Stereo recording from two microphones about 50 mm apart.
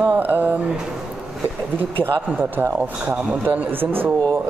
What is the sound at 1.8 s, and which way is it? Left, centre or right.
A man's voice, right.